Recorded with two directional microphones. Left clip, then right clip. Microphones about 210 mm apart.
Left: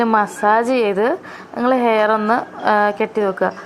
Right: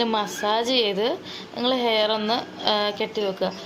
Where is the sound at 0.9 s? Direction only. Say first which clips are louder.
Left 7 dB; 15° left (ahead or behind).